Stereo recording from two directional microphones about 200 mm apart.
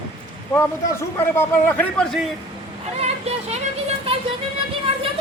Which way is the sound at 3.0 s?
30° right (ahead or behind).